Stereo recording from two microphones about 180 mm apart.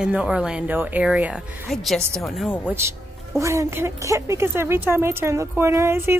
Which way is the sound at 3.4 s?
15° right (ahead or behind).